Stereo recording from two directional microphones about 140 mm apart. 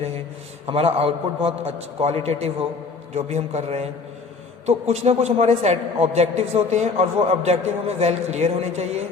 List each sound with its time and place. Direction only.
0.7 s a woman's voice: 45° right (ahead or behind)